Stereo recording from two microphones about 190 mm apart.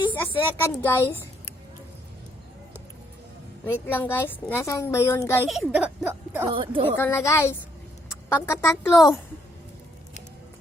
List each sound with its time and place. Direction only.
0.1 s a child's voice: 10° left (ahead or behind)
3.7 s a child's voice: 10° left (ahead or behind)
5.5 s speech: centre (ahead or behind)
6.5 s speech: 30° right (ahead or behind)
6.8 s a child's voice: 10° left (ahead or behind)